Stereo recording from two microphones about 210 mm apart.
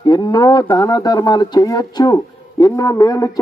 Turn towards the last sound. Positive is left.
turn(degrees=15)  # may be behind; listen again after turning